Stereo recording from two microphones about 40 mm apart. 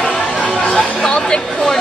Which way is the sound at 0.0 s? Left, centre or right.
Left.